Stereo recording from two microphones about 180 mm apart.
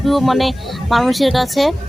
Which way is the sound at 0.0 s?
Centre (ahead or behind).